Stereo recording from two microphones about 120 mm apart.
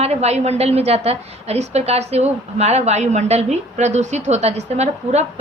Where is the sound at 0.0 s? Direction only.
65° right (ahead or behind).